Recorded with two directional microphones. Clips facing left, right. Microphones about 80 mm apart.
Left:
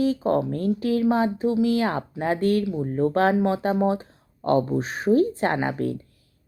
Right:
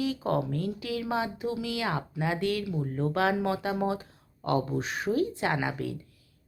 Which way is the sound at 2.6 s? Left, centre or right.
Left.